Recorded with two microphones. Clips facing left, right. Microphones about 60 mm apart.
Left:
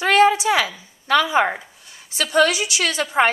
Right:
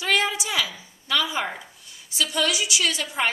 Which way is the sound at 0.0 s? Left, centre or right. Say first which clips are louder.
Left 9 dB; left.